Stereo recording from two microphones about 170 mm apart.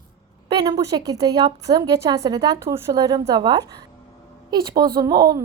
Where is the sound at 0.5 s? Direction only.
20° right (ahead or behind).